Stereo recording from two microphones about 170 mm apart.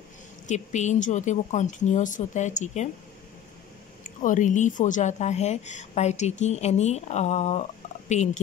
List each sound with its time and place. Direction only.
0.5 s speech: 45° left (ahead or behind)
4.0 s speech: 50° left (ahead or behind)